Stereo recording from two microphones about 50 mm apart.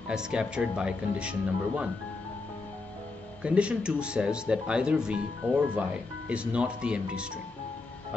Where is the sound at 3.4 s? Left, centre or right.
Right.